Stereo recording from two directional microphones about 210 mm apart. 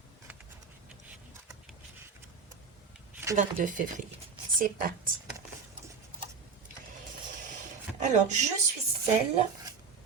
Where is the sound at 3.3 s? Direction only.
35° right (ahead or behind).